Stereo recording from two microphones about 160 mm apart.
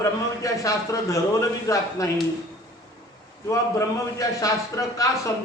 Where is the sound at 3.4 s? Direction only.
20° left (ahead or behind).